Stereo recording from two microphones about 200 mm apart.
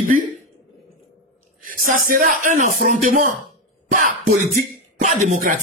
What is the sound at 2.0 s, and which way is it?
Speech, 40° right (ahead or behind).